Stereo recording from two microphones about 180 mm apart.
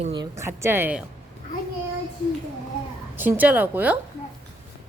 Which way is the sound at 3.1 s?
10° right (ahead or behind).